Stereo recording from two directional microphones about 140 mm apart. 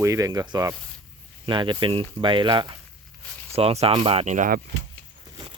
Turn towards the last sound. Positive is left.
turn(degrees=-35)  # may be behind; listen again after turning